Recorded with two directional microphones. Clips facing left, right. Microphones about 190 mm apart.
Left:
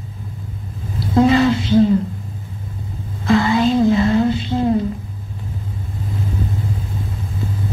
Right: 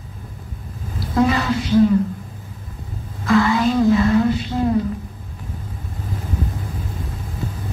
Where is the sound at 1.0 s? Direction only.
25° left (ahead or behind).